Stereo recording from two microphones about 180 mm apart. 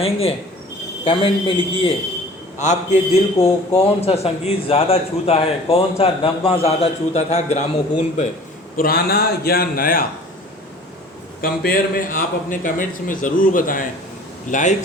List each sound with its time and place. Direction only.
0.0 s a man's voice: 30° left (ahead or behind)
2.6 s a man's voice: 40° left (ahead or behind)
8.7 s a man's voice: 55° left (ahead or behind)
11.3 s a man's voice: 50° left (ahead or behind)